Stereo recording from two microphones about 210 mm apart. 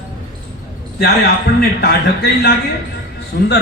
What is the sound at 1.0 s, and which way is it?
A man's voice, 45° left (ahead or behind).